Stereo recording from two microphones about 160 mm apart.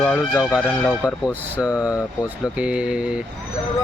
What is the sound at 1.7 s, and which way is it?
Music, 20° left (ahead or behind).